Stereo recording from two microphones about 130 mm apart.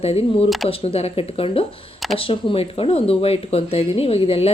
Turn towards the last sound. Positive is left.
turn(degrees=50)  # may be behind; listen again after turning